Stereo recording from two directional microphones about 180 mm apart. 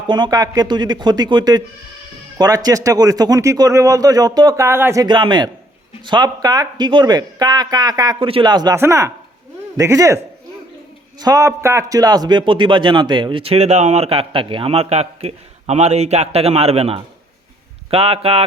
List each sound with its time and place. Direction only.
0.1 s speech: 25° right (ahead or behind)
2.6 s a man's voice: 20° right (ahead or behind)
11.2 s a man's voice: 20° right (ahead or behind)